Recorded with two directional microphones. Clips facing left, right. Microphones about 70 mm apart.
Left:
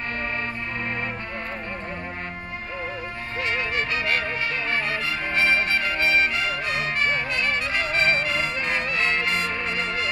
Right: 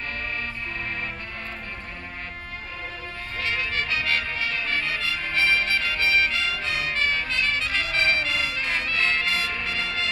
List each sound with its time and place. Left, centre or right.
3.4 s music: left